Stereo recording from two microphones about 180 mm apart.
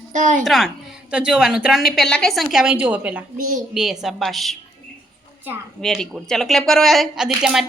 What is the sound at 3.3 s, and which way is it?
Speech, 45° right (ahead or behind).